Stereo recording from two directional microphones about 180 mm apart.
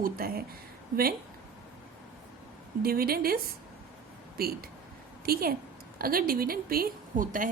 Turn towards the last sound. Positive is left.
turn(degrees=-50)  # may be behind; listen again after turning